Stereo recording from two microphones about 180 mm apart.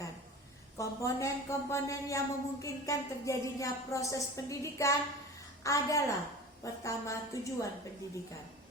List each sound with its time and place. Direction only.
0.8 s a woman's voice: 15° left (ahead or behind)